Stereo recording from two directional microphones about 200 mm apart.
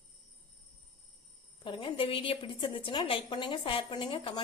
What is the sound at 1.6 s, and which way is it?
A woman's voice, 25° left (ahead or behind).